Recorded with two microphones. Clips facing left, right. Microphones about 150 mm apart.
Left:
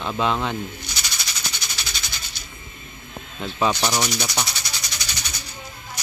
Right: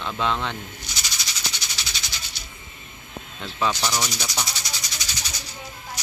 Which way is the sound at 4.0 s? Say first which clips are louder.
Left 4 dB; 60° left (ahead or behind).